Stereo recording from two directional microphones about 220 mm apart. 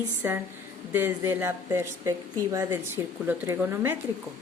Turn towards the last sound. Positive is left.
turn(degrees=-10)  # may be behind; listen again after turning